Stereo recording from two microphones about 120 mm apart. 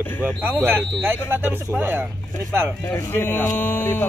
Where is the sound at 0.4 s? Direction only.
15° right (ahead or behind).